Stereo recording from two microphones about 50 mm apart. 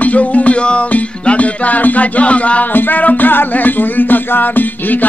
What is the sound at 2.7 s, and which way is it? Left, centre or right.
Music, left.